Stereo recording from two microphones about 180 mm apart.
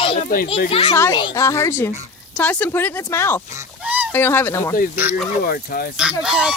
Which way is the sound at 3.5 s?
10° right (ahead or behind).